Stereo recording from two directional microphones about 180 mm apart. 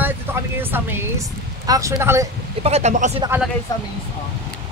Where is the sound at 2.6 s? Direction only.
35° right (ahead or behind).